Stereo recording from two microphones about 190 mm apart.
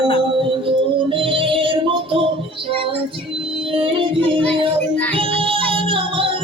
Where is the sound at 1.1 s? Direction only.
30° right (ahead or behind).